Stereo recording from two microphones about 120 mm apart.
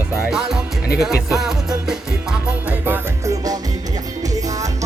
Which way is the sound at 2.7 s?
15° right (ahead or behind).